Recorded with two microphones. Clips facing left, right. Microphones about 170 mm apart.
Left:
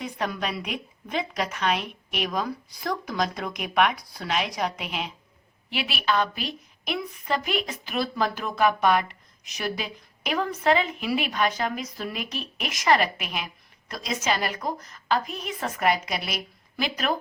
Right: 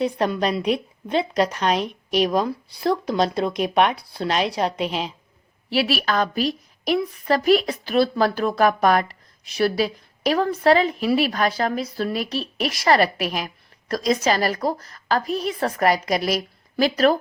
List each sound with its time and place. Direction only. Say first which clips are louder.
0.0 s a woman's voice: right 8 dB; 30° right (ahead or behind)